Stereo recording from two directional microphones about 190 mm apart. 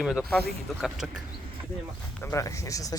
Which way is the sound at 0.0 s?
Centre (ahead or behind).